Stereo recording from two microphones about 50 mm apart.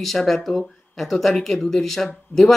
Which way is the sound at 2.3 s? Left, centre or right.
Left.